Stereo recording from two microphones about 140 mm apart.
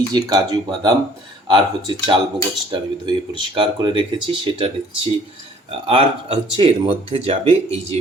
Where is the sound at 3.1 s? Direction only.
40° right (ahead or behind).